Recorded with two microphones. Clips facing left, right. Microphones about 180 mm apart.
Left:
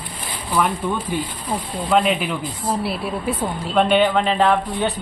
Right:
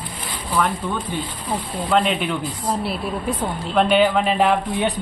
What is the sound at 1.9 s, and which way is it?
Speech, 5° left (ahead or behind).